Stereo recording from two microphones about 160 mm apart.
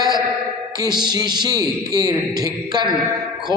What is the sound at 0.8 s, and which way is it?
A man's voice, 25° right (ahead or behind).